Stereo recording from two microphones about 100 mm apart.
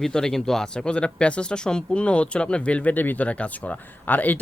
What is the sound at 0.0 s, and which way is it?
Speech, 5° left (ahead or behind).